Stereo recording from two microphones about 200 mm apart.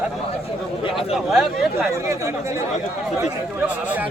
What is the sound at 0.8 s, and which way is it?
Speech, 25° left (ahead or behind).